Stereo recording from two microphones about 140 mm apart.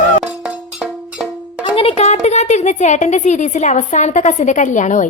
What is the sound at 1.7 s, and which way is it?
A woman's voice, 45° left (ahead or behind).